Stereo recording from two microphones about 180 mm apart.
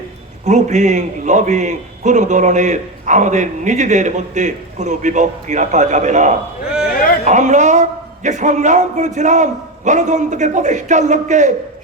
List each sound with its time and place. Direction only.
0.4 s a man's voice: 40° right (ahead or behind)
6.8 s a sound: 55° left (ahead or behind)
7.3 s a man's voice: 40° right (ahead or behind)